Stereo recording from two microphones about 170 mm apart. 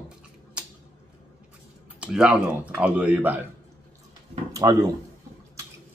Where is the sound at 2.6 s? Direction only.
10° right (ahead or behind).